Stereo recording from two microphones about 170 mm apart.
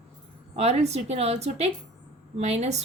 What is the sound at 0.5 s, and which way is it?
A woman's voice, 40° right (ahead or behind).